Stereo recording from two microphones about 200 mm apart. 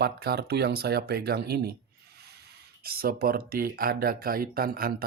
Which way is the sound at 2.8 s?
50° right (ahead or behind).